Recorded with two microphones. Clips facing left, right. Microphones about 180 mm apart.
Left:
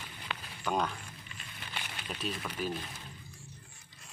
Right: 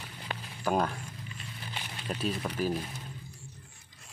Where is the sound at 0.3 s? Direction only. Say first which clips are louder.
Right 3 dB; 45° right (ahead or behind).